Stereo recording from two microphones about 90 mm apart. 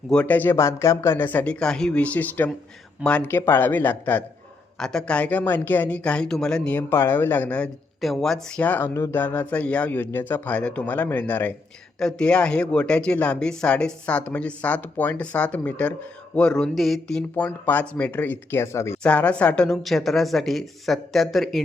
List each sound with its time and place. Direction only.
0.1 s speech: 15° left (ahead or behind)
3.2 s speech: 25° left (ahead or behind)
4.8 s speech: 5° left (ahead or behind)
6.7 s speech: 25° left (ahead or behind)
8.0 s speech: centre (ahead or behind); by 11.5 s 20° left (ahead or behind)
11.9 s speech: 5° left (ahead or behind)
17.3 s speech: 20° left (ahead or behind)
19.0 s a woman's voice: 15° left (ahead or behind)